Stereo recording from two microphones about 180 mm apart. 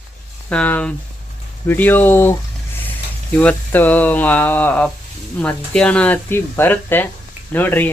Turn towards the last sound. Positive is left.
turn(degrees=10)  # may be behind; listen again after turning